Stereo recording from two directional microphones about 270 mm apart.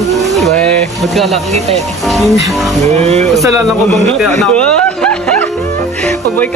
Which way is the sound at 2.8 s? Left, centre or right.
Right.